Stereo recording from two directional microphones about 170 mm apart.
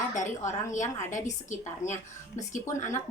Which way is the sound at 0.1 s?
45° left (ahead or behind).